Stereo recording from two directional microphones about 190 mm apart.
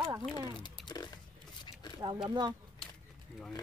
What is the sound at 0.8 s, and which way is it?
Speech, 25° left (ahead or behind).